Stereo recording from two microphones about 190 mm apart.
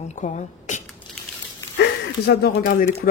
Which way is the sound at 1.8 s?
65° left (ahead or behind).